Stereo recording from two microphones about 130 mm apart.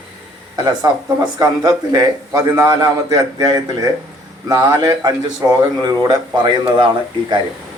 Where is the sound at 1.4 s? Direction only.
30° right (ahead or behind).